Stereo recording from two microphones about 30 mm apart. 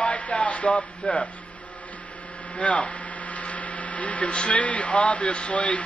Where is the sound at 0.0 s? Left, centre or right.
Left.